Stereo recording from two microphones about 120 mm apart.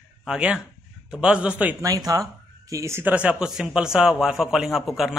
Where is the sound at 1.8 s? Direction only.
30° right (ahead or behind).